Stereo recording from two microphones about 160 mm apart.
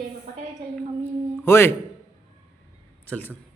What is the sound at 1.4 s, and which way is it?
Speech, 15° left (ahead or behind).